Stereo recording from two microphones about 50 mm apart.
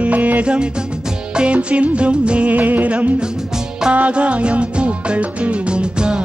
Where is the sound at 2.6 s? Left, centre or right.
Right.